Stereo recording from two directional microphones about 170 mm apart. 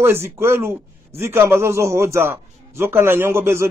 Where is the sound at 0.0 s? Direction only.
15° right (ahead or behind).